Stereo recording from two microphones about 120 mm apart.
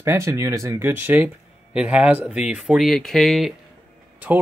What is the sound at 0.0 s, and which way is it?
Speech, 25° right (ahead or behind).